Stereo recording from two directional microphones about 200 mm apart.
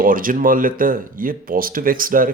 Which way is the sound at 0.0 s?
45° right (ahead or behind).